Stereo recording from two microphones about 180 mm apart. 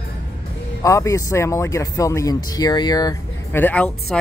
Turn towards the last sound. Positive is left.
turn(degrees=10)  # may be behind; listen again after turning